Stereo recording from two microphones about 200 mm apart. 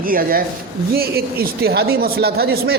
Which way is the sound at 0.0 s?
45° right (ahead or behind).